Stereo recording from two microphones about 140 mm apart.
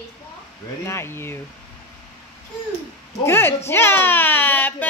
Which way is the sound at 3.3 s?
15° left (ahead or behind).